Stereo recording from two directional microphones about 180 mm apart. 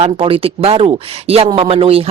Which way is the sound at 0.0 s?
30° right (ahead or behind).